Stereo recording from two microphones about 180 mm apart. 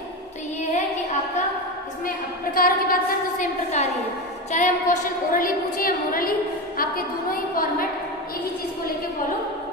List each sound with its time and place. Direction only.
2.0 s a woman's voice: 55° left (ahead or behind)